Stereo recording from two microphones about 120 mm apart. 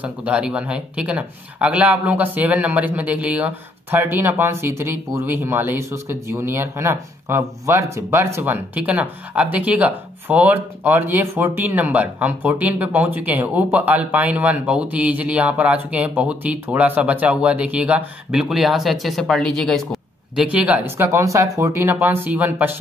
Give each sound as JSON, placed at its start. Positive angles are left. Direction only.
{"t": 0.0, "sound": "speech", "side_deg": -10}
{"t": 20.4, "sound": "speech", "side_deg": -10}